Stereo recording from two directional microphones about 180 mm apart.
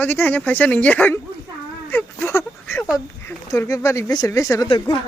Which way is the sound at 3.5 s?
15° left (ahead or behind).